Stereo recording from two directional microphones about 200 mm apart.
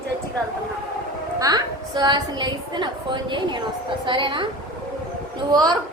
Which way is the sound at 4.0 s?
25° right (ahead or behind).